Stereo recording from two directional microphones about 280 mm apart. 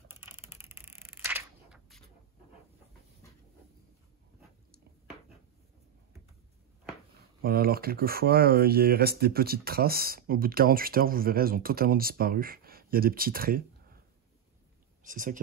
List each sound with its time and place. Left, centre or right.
0.1 s a sound: centre
7.4 s speech: right
15.0 s speech: right